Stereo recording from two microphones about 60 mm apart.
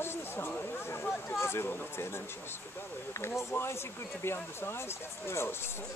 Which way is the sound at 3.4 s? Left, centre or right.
Left.